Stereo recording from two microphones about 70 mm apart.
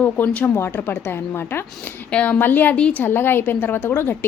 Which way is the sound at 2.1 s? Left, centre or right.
Centre.